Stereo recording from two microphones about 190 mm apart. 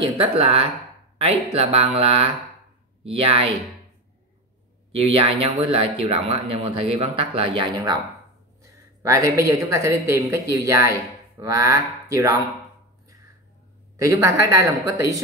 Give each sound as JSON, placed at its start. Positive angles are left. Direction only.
{"t": 0.0, "sound": "speech", "side_deg": -30}
{"t": 4.9, "sound": "speech", "side_deg": -30}
{"t": 9.0, "sound": "a woman's voice", "side_deg": -15}
{"t": 13.9, "sound": "a woman's voice", "side_deg": -15}